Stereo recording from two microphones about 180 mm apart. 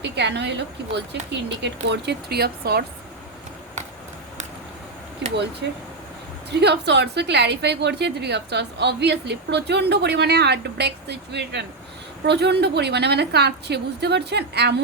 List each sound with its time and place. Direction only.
0.0 s a woman's voice: 75° right (ahead or behind)
5.6 s a woman's voice: 80° right